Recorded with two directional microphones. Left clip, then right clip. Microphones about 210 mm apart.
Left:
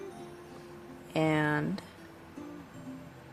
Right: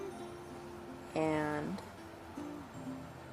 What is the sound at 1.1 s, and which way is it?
Speech, 35° left (ahead or behind).